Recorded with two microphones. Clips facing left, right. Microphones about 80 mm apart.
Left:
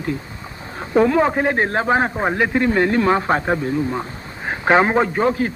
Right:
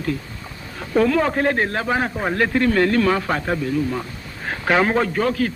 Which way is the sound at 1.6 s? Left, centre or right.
Left.